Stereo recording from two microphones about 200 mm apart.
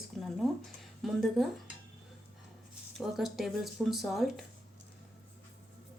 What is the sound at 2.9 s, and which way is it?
A woman's voice, centre (ahead or behind).